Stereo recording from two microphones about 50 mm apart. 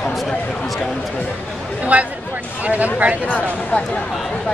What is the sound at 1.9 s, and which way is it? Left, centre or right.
Speech, right.